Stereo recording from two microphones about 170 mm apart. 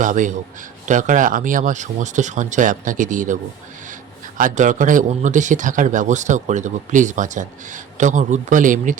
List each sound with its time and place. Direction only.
0.0 s a man's voice: 50° right (ahead or behind)
4.4 s a man's voice: 50° right (ahead or behind)